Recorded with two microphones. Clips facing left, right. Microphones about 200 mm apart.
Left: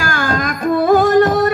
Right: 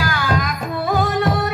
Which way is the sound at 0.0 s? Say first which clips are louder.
Left 2 dB; 50° left (ahead or behind).